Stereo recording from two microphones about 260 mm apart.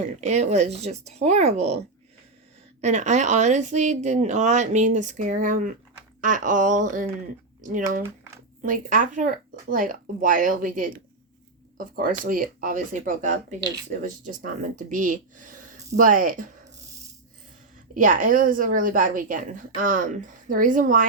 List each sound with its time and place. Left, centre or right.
0.2 s a woman's voice: right
2.8 s a woman's voice: right
17.9 s a woman's voice: right